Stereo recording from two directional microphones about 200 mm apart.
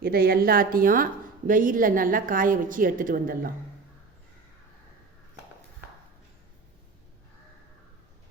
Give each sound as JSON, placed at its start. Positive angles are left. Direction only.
{"t": 0.0, "sound": "a woman's voice", "side_deg": -50}